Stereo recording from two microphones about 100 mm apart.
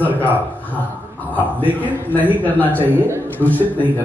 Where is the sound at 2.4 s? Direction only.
15° left (ahead or behind).